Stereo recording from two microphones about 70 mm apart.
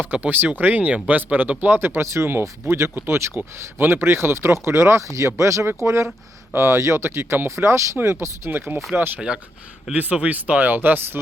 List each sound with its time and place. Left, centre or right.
0.0 s speech: right